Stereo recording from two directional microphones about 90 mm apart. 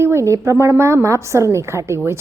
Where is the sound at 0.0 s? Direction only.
30° right (ahead or behind).